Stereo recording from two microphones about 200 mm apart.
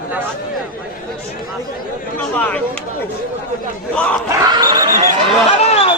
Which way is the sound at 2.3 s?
5° left (ahead or behind).